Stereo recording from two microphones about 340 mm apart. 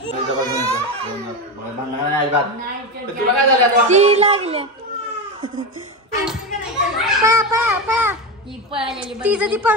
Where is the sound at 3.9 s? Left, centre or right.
Centre.